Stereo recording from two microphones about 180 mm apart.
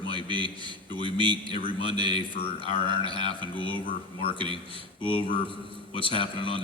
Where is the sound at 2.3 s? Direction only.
30° left (ahead or behind).